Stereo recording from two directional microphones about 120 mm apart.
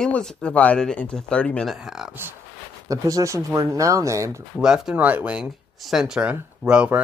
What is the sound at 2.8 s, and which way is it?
Speech, 30° right (ahead or behind).